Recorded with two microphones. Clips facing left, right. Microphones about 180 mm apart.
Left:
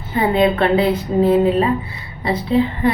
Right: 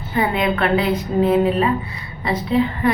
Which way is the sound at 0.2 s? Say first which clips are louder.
Left 4 dB; 30° left (ahead or behind).